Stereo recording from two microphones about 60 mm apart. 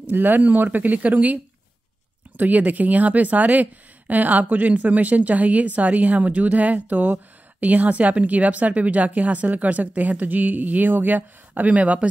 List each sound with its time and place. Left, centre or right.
0.1 s speech: right